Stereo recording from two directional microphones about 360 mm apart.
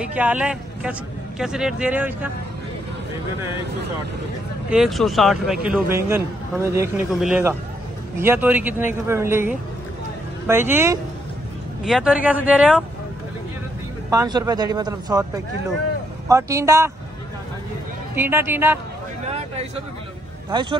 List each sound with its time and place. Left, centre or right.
0.0 s speech: centre
4.6 s speech: centre
14.1 s speech: centre
18.1 s speech: centre
19.2 s a sound: centre